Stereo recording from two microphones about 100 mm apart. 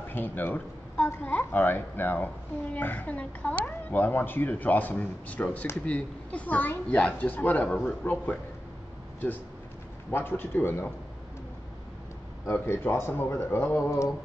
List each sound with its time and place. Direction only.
0.1 s a woman's voice: 20° left (ahead or behind)
10.1 s speech: 20° left (ahead or behind)
12.6 s speech: 25° left (ahead or behind)